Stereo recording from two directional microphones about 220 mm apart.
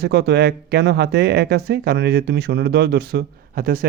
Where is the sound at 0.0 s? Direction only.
50° right (ahead or behind).